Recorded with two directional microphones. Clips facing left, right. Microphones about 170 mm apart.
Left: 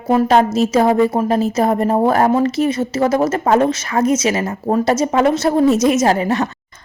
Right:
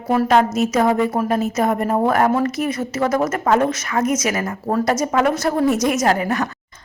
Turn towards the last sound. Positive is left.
turn(degrees=25)  # may be behind; listen again after turning